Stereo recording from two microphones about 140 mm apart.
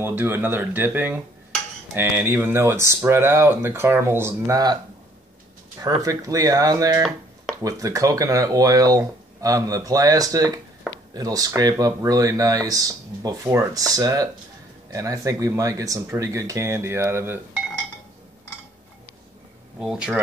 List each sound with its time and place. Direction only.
0.0 s speech: 15° right (ahead or behind)
6.0 s speech: 25° right (ahead or behind)
19.8 s speech: centre (ahead or behind)